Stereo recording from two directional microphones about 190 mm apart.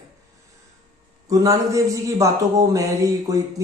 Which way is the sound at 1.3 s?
15° right (ahead or behind).